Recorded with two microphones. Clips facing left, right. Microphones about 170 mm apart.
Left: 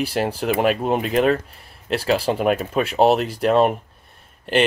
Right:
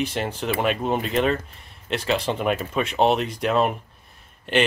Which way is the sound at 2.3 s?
35° left (ahead or behind).